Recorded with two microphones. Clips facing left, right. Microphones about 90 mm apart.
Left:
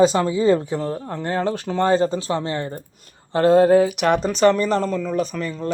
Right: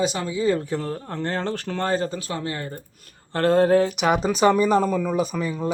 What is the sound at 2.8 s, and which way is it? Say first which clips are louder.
Speech: left 4 dB; 15° left (ahead or behind).